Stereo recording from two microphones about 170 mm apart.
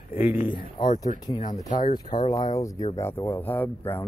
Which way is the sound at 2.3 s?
20° left (ahead or behind).